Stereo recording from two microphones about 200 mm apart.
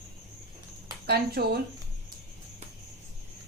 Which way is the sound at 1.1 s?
50° right (ahead or behind).